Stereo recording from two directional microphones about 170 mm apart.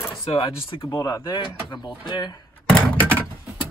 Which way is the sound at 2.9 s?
10° left (ahead or behind).